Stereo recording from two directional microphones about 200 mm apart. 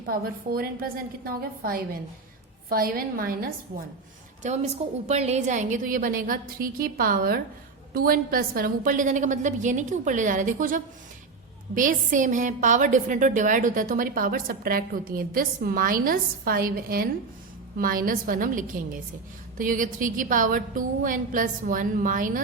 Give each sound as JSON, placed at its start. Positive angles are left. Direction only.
{"t": 0.1, "sound": "a woman's voice", "side_deg": -45}
{"t": 4.4, "sound": "a woman's voice", "side_deg": -35}